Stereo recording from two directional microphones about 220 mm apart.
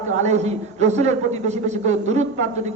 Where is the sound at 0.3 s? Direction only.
30° right (ahead or behind).